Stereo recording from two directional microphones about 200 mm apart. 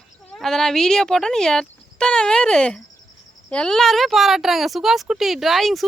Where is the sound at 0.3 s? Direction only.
Centre (ahead or behind).